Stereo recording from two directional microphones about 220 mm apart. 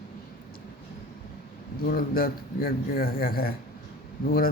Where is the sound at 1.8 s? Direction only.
45° left (ahead or behind).